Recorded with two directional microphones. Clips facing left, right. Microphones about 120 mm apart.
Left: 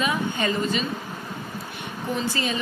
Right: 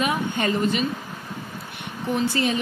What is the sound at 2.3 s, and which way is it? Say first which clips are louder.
Speech: right 4 dB; 55° right (ahead or behind).